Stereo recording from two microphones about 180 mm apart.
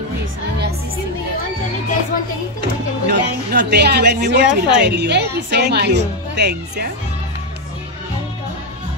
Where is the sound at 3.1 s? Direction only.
70° right (ahead or behind).